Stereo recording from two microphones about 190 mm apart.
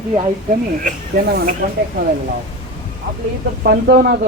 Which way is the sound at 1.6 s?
50° right (ahead or behind).